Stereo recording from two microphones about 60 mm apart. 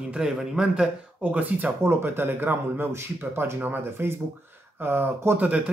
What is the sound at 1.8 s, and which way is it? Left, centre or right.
Speech, right.